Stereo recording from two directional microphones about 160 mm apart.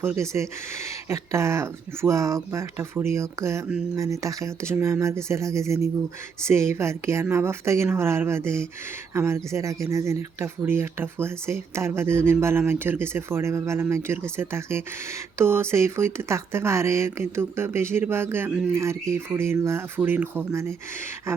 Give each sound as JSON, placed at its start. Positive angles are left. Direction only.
{"t": 0.0, "sound": "speech", "side_deg": -15}